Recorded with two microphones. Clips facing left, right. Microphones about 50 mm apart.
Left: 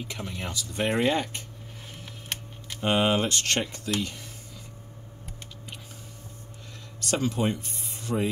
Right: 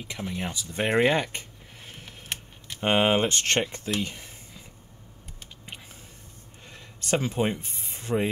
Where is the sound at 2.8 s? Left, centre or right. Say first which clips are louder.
Right 2 dB; right.